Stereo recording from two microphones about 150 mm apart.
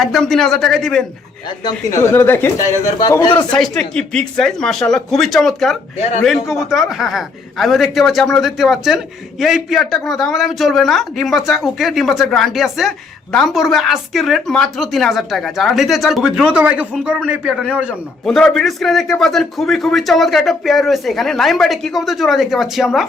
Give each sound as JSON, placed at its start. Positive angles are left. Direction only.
{"t": 0.0, "sound": "a man's voice", "side_deg": 0}
{"t": 1.6, "sound": "speech", "side_deg": 20}
{"t": 3.5, "sound": "a man's voice", "side_deg": 5}
{"t": 18.3, "sound": "a man's voice", "side_deg": 5}